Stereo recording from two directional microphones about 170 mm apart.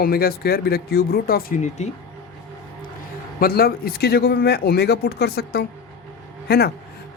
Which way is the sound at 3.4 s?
60° left (ahead or behind).